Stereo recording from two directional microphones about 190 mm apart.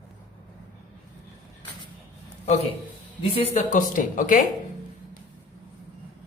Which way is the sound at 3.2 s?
30° left (ahead or behind).